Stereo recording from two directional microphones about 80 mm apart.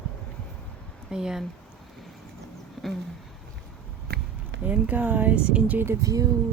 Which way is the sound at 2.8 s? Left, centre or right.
Centre.